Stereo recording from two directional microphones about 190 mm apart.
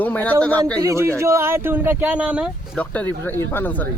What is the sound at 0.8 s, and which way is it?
Speech, 15° right (ahead or behind).